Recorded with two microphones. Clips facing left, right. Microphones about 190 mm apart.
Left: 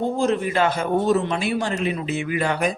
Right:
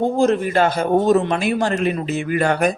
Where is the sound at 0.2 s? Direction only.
45° right (ahead or behind).